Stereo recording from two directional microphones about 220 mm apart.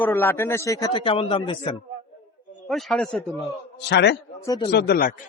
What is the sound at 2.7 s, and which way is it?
Speech, centre (ahead or behind).